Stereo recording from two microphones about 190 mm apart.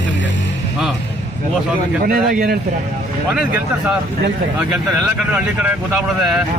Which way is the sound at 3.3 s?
5° right (ahead or behind).